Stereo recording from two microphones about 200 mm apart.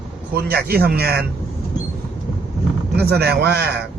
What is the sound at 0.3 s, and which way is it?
Speech, 50° right (ahead or behind).